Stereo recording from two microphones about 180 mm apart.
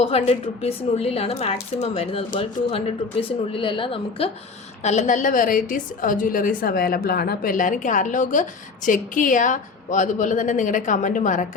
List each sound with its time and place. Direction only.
0.0 s a woman's voice: 35° left (ahead or behind)